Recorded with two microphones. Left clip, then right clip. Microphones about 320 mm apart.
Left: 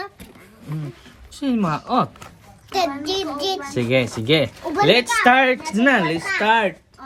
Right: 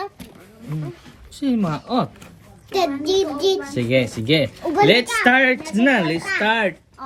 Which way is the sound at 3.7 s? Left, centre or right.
Centre.